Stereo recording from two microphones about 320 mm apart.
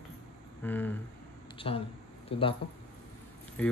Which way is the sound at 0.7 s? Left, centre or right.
Centre.